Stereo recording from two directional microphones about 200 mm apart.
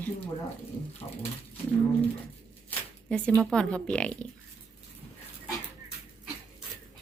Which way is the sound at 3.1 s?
5° left (ahead or behind).